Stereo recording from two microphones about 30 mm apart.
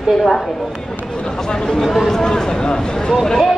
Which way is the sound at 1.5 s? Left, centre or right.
Left.